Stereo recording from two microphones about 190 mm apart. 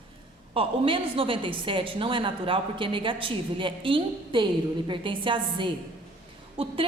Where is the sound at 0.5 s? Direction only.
30° right (ahead or behind).